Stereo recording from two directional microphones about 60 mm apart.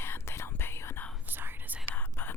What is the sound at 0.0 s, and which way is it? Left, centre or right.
Whispering, left.